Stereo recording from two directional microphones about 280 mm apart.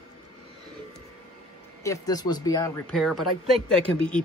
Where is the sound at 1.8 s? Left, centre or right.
Centre.